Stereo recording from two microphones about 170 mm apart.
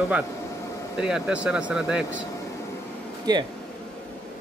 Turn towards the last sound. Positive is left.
turn(degrees=-25)  # may be behind; listen again after turning